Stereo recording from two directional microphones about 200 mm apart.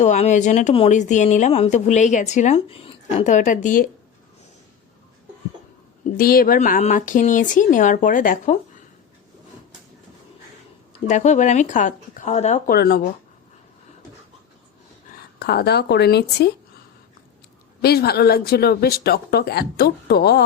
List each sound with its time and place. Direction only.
0.0 s speech: 35° left (ahead or behind)
6.1 s speech: 45° left (ahead or behind)
10.9 s speech: 35° left (ahead or behind)
12.7 s speech: 50° left (ahead or behind)
15.4 s speech: 55° left (ahead or behind)
17.8 s speech: 50° left (ahead or behind)